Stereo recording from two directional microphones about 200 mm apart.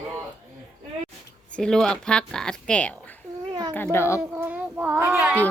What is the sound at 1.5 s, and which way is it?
Speech, 5° left (ahead or behind).